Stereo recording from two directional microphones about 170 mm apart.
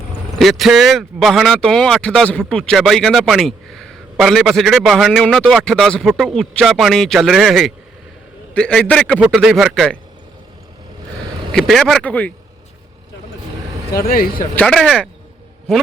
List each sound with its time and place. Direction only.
0.3 s speech: centre (ahead or behind)
11.5 s speech: centre (ahead or behind)
13.9 s speech: 60° left (ahead or behind)
14.5 s speech: 5° left (ahead or behind)